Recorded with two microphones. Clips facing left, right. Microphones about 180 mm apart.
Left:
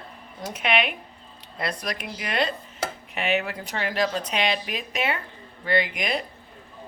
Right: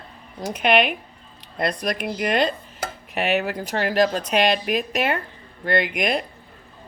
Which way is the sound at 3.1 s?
40° right (ahead or behind).